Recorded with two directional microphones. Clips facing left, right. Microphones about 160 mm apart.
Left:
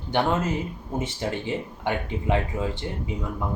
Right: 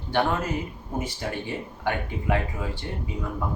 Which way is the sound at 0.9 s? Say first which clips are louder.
Left 2 dB; 25° left (ahead or behind).